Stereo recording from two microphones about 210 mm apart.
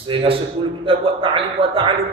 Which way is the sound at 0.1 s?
25° right (ahead or behind).